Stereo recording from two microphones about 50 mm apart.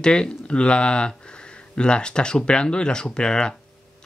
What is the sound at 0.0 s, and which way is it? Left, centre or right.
Speech, centre.